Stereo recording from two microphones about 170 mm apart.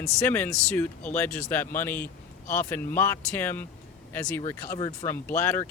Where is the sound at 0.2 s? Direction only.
10° left (ahead or behind).